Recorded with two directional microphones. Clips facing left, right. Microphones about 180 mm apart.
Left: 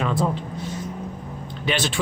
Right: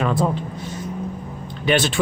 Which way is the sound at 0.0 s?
50° right (ahead or behind).